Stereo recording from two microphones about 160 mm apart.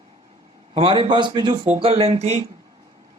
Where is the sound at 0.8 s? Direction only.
30° right (ahead or behind).